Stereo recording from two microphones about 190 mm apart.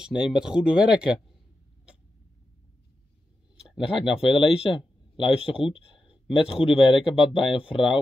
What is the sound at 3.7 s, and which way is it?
Speech, centre (ahead or behind).